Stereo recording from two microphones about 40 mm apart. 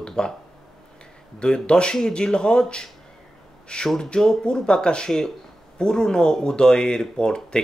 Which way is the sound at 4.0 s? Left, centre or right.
Centre.